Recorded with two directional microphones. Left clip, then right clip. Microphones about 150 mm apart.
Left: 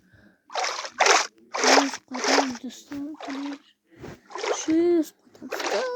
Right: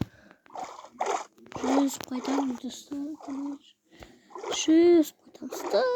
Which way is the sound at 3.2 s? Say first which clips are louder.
Left 3 dB; 50° left (ahead or behind).